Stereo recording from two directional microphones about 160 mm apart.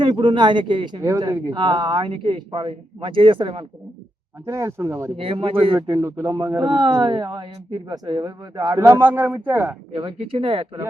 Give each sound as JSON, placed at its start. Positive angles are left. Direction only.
{"t": 0.0, "sound": "speech", "side_deg": -30}
{"t": 4.4, "sound": "speech", "side_deg": -15}
{"t": 5.1, "sound": "speech", "side_deg": -35}
{"t": 5.8, "sound": "speech", "side_deg": -20}
{"t": 9.9, "sound": "speech", "side_deg": -30}